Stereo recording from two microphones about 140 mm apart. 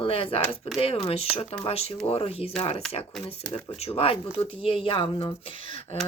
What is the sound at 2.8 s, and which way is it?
Speech, 5° left (ahead or behind).